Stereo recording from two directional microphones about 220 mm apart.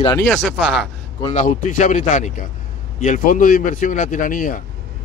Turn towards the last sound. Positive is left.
turn(degrees=40)  # may be behind; listen again after turning